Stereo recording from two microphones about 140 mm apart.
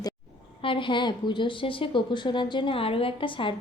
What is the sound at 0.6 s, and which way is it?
A woman's voice, 35° left (ahead or behind).